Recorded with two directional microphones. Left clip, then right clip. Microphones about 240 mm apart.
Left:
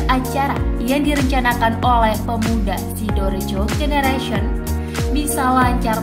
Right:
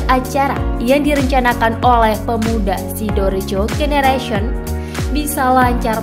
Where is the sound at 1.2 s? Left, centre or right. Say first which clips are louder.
Right 3 dB; right.